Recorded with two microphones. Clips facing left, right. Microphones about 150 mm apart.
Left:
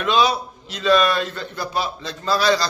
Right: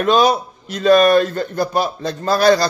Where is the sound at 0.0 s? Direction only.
45° right (ahead or behind).